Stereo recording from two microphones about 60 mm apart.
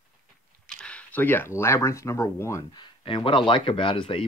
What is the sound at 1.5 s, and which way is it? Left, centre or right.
Speech, left.